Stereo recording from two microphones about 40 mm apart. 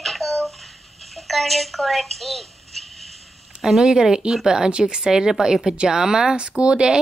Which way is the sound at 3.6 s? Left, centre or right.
Centre.